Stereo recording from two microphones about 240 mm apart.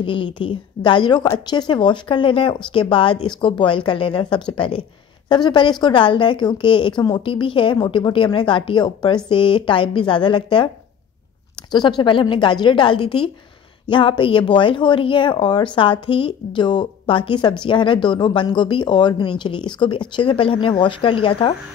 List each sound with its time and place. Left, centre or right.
0.0 s speech: left
12.0 s speech: centre